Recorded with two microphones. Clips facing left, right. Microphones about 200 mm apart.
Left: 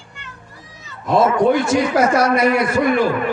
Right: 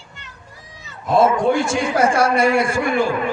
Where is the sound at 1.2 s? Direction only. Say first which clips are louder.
Left 1 dB; 30° right (ahead or behind).